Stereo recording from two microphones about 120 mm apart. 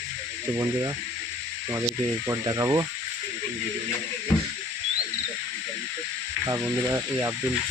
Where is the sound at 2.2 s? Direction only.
30° right (ahead or behind).